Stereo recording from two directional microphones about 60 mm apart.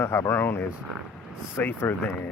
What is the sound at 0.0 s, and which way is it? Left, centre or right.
Speech, left.